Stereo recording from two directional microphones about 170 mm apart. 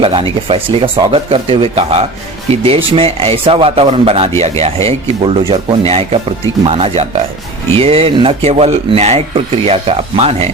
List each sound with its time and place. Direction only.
0.0 s speech: 35° right (ahead or behind)